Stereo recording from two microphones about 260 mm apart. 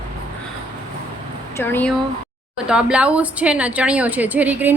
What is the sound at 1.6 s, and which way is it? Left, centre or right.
Speech, centre.